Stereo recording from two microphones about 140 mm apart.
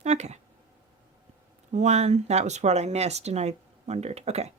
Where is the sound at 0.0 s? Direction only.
55° right (ahead or behind).